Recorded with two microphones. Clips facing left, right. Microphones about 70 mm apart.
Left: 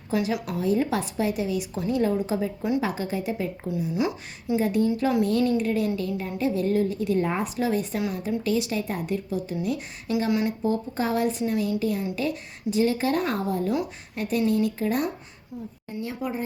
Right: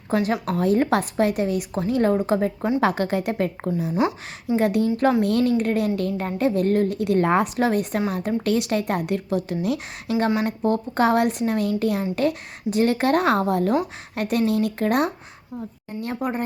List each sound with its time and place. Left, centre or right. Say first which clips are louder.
0.1 s a woman's voice: right 4 dB; right
2.8 s a woman's voice: right 6 dB; right
3.9 s speech: right 4 dB; right
4.5 s a woman's voice: right 3 dB; right
10.1 s a woman's voice: right 3 dB; right